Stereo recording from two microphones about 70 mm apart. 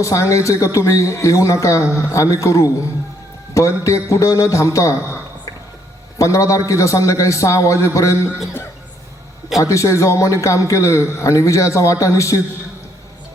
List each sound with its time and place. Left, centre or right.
0.0 s a man's voice: left
6.1 s a man's voice: left
9.6 s a man's voice: left